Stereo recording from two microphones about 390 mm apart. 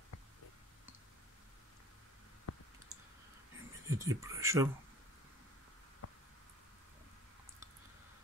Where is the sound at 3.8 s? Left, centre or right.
Centre.